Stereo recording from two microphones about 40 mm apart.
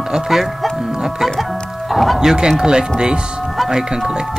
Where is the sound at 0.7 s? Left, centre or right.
Centre.